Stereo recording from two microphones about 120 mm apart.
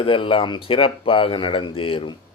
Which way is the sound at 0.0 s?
45° left (ahead or behind).